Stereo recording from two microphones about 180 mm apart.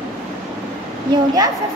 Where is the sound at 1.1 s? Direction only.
20° right (ahead or behind).